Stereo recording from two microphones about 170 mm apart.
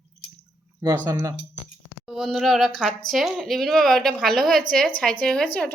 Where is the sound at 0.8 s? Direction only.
20° right (ahead or behind).